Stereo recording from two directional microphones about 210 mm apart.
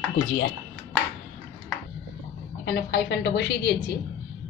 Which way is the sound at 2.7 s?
50° left (ahead or behind).